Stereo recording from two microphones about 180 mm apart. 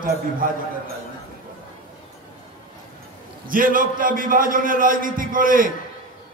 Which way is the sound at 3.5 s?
50° right (ahead or behind).